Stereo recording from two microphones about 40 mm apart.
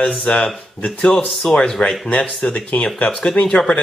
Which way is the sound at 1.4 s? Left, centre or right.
Centre.